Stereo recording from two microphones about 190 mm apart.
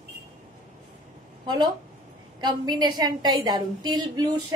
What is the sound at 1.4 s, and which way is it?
Speech, 20° right (ahead or behind).